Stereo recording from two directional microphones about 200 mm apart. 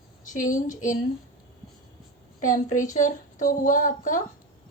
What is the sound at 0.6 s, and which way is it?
Speech, 40° left (ahead or behind).